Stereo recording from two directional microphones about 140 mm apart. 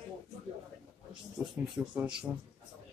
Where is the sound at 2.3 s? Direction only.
20° right (ahead or behind).